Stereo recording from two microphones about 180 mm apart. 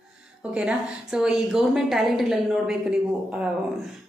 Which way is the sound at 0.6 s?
5° right (ahead or behind).